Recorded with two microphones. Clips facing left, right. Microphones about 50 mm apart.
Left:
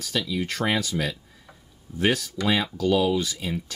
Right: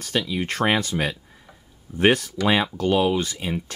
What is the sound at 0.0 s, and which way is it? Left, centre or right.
Speech, right.